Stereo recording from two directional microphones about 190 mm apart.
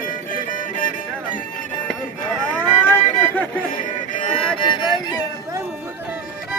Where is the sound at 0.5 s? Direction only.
45° left (ahead or behind).